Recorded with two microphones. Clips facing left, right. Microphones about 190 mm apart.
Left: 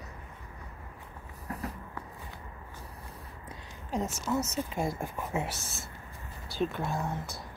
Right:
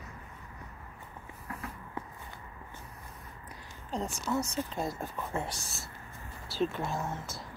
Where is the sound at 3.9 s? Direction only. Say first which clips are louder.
Left 2 dB; 5° left (ahead or behind).